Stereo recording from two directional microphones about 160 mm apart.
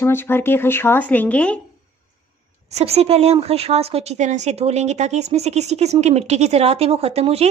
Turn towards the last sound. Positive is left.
turn(degrees=-40)  # may be behind; listen again after turning